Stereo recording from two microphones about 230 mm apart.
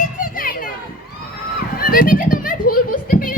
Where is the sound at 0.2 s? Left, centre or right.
Left.